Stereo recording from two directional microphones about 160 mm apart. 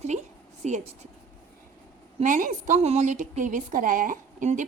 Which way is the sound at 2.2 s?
55° right (ahead or behind).